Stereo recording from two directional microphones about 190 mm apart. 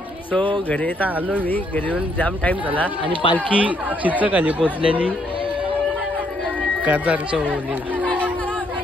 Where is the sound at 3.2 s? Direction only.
30° left (ahead or behind).